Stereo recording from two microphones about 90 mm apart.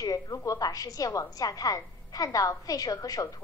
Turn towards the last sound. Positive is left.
turn(degrees=40)  # may be behind; listen again after turning